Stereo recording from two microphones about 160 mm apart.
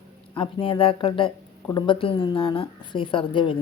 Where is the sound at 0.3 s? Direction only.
35° left (ahead or behind).